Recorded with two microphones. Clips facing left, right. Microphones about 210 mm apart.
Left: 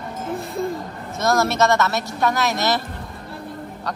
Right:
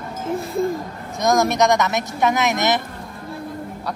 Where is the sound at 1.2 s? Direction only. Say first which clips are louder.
Right 2 dB; 15° right (ahead or behind).